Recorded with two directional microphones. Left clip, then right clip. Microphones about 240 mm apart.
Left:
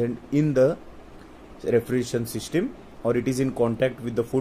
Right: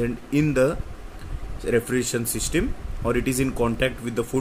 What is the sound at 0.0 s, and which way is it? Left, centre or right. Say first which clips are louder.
Speech: right 1 dB; centre.